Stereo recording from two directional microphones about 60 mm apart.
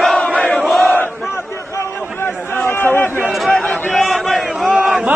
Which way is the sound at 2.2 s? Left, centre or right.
Left.